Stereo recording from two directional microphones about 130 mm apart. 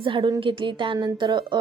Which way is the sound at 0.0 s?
40° right (ahead or behind).